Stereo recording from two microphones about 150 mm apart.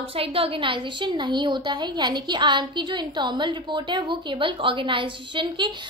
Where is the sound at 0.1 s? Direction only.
40° right (ahead or behind).